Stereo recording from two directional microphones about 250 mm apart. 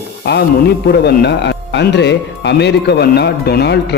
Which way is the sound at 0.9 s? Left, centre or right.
Left.